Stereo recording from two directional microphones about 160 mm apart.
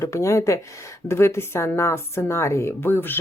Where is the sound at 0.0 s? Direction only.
20° left (ahead or behind).